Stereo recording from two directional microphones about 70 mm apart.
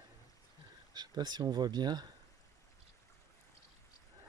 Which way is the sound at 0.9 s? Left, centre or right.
Right.